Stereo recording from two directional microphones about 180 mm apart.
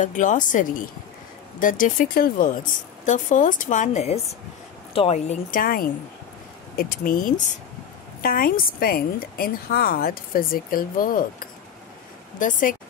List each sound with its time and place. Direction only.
0.0 s a woman's voice: 45° left (ahead or behind)